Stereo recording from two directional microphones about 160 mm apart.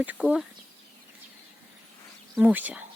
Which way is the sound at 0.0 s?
10° right (ahead or behind).